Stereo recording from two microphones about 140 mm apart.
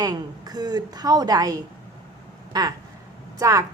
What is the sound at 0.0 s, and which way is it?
A woman's voice, 30° right (ahead or behind).